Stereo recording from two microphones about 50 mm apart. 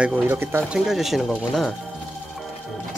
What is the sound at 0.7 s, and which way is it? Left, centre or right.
Speech, centre.